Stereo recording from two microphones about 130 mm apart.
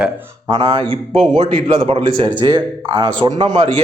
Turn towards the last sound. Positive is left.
turn(degrees=-40)  # may be behind; listen again after turning